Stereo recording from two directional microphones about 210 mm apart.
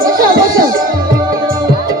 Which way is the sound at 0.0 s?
45° right (ahead or behind).